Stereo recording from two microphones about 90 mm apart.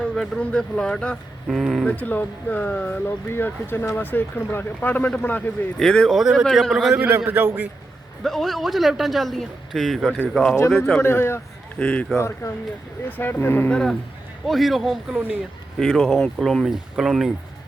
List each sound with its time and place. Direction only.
0.0 s speech: 10° left (ahead or behind)
2.0 s speech: 20° left (ahead or behind)
5.8 s a man's voice: 10° left (ahead or behind)
6.9 s a man's voice: 20° right (ahead or behind)
8.2 s a man's voice: centre (ahead or behind)
11.0 s speech: 25° left (ahead or behind)
11.8 s speech: 15° left (ahead or behind)
12.1 s speech: 30° left (ahead or behind)
13.1 s speech: 20° left (ahead or behind)
14.4 s a man's voice: centre (ahead or behind)
16.6 s a man's voice: 5° right (ahead or behind)